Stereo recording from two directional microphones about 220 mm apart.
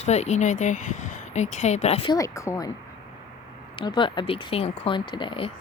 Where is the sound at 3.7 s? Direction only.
20° left (ahead or behind).